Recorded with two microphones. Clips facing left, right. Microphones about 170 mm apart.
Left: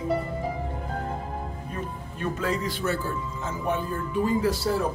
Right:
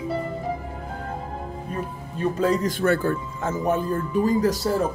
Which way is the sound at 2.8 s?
55° right (ahead or behind).